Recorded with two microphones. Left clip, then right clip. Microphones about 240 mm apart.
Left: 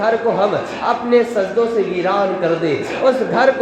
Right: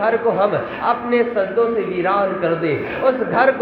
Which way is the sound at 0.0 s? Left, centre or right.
Left.